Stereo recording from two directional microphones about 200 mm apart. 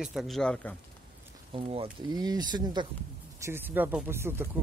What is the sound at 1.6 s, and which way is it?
Speech, 30° right (ahead or behind).